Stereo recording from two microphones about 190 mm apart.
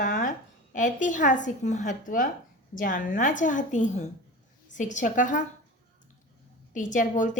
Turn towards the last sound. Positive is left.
turn(degrees=40)  # may be behind; listen again after turning